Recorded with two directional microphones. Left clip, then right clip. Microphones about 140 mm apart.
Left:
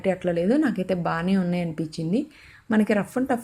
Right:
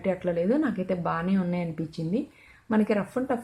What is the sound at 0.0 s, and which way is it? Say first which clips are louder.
Speech: left 3 dB; 30° left (ahead or behind).